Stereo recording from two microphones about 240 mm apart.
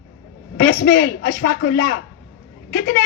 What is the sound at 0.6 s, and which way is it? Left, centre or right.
Speech, left.